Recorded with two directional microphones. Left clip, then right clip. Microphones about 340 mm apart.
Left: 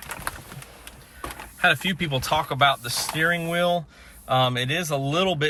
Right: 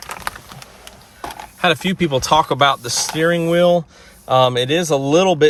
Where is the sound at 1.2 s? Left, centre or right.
Centre.